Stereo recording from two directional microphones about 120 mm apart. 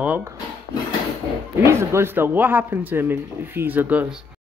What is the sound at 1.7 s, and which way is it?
A man's voice, 20° right (ahead or behind).